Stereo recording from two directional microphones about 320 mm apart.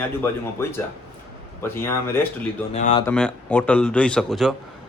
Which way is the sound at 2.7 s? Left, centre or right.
Left.